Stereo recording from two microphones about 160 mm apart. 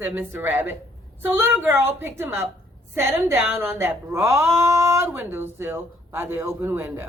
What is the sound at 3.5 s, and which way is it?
A woman's voice, 15° right (ahead or behind).